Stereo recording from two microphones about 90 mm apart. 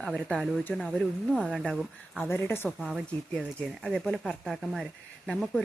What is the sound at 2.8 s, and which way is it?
Speech, 10° right (ahead or behind).